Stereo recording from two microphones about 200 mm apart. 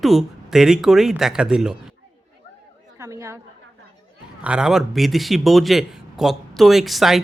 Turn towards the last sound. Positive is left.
turn(degrees=0)  # may be behind; listen again after turning